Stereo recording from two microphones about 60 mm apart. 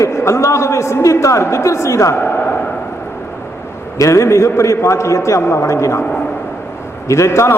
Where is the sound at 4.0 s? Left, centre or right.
Left.